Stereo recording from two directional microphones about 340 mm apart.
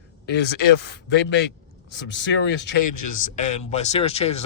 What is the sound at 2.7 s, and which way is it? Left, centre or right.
Speech, left.